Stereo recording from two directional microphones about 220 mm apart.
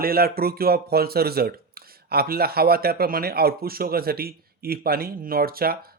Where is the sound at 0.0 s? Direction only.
45° right (ahead or behind).